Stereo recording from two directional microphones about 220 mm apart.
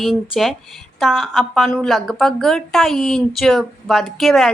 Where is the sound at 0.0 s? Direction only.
Centre (ahead or behind).